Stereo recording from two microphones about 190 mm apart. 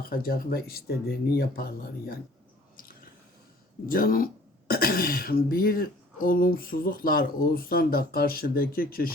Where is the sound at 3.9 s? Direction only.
50° left (ahead or behind).